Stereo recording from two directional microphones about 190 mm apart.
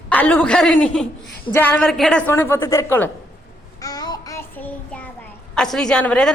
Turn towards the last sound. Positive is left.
turn(degrees=5)  # may be behind; listen again after turning